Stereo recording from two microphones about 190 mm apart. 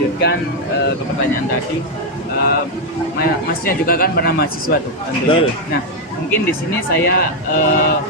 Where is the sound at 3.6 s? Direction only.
50° left (ahead or behind).